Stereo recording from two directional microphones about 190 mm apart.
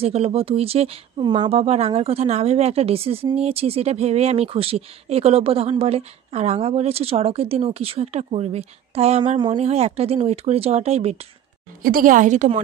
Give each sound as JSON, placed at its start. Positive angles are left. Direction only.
{"t": 0.0, "sound": "speech", "side_deg": -30}
{"t": 11.8, "sound": "a woman's voice", "side_deg": -50}